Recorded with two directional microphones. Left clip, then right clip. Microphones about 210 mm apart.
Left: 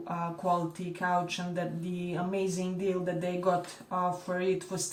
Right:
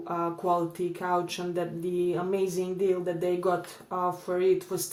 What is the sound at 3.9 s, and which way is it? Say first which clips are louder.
Speech: right 2 dB; 45° right (ahead or behind).